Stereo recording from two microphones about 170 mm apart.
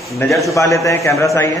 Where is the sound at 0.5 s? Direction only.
20° left (ahead or behind).